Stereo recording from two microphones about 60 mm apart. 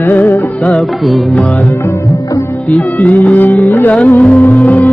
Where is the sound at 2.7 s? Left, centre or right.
Left.